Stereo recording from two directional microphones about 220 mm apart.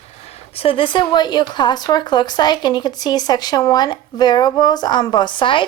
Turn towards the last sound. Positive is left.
turn(degrees=20)  # may be behind; listen again after turning